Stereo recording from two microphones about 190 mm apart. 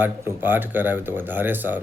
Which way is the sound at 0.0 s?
10° right (ahead or behind).